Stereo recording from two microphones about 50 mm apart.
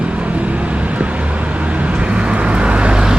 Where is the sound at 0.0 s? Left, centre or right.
Right.